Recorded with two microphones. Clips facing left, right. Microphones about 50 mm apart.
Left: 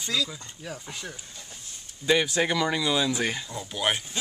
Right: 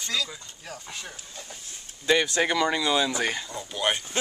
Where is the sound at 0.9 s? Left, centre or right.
Centre.